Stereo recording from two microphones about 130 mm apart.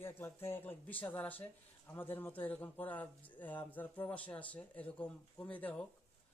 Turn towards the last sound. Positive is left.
turn(degrees=10)  # may be behind; listen again after turning